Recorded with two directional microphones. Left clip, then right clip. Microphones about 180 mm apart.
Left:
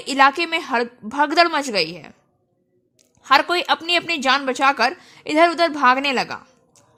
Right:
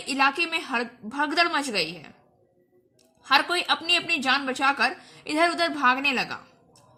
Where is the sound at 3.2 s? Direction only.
40° left (ahead or behind).